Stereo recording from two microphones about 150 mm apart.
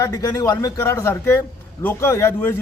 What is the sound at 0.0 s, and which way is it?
A man's voice, 25° left (ahead or behind).